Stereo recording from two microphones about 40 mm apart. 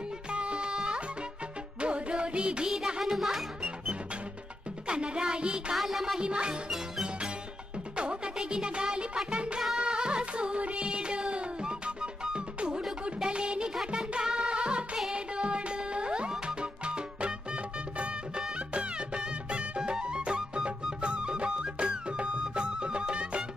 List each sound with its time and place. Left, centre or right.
0.3 s music: right
3.0 s music: centre
4.8 s music: right
5.8 s music: centre
6.1 s music: right
7.9 s music: right
9.3 s music of bollywood: right
9.8 s music: right